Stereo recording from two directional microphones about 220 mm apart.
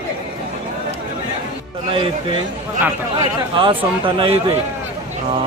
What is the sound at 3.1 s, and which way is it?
A man's voice, 25° right (ahead or behind).